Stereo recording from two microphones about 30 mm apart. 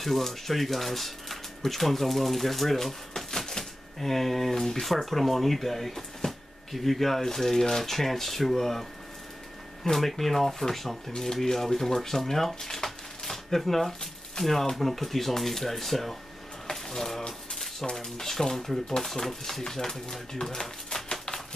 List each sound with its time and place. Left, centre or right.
0.0 s speech: centre
3.3 s typewriter: centre
4.8 s speech: centre
9.8 s speech: centre
17.3 s typewriter: centre
17.9 s speech: centre